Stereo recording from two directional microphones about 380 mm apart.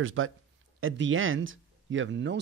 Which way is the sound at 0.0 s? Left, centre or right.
Right.